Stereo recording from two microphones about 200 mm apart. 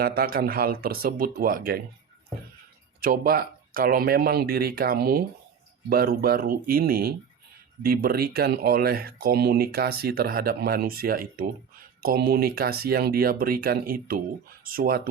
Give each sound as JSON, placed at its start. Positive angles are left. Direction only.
{"t": 0.0, "sound": "speech", "side_deg": -50}
{"t": 3.0, "sound": "speech", "side_deg": -45}